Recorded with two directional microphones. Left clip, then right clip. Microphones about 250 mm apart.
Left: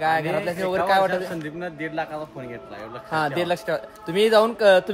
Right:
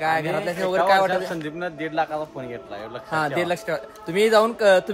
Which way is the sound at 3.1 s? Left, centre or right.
Centre.